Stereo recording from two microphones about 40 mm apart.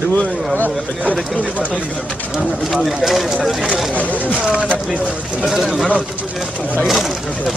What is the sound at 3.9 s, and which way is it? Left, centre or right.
Speech, left.